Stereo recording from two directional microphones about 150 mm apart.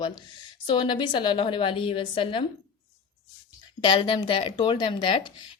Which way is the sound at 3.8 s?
35° left (ahead or behind).